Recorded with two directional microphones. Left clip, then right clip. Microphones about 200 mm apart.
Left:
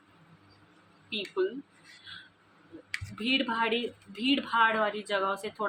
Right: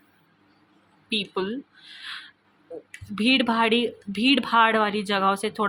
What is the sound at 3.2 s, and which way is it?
Speech, 60° right (ahead or behind).